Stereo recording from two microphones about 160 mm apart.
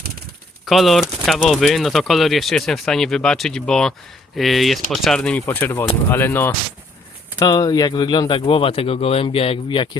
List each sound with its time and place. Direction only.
0.6 s speech: centre (ahead or behind)
7.3 s speech: 25° left (ahead or behind)